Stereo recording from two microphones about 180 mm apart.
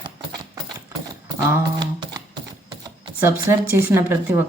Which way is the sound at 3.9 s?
10° right (ahead or behind).